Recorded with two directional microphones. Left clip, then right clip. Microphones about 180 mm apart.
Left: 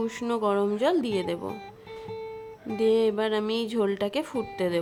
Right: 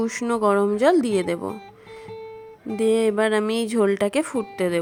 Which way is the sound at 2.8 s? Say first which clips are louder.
Right 3 dB; 30° right (ahead or behind).